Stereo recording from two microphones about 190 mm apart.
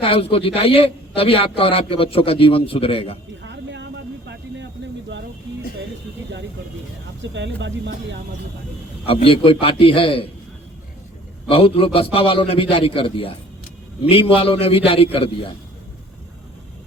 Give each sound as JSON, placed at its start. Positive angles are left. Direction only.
{"t": 0.0, "sound": "a man's voice", "side_deg": 30}
{"t": 3.4, "sound": "a sound", "side_deg": -70}
{"t": 7.2, "sound": "speech", "side_deg": -70}
{"t": 9.0, "sound": "a man's voice", "side_deg": 30}
{"t": 11.4, "sound": "a man's voice", "side_deg": 30}